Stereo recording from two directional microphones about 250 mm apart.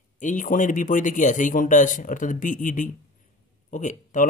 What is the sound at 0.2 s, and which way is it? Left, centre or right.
A man's voice, left.